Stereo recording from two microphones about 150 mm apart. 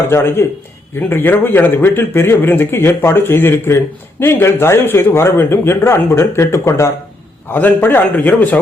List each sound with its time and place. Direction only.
0.1 s a man's voice: 15° left (ahead or behind)